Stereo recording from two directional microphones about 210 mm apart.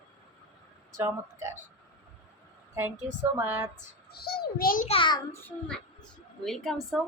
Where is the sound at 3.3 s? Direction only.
10° right (ahead or behind).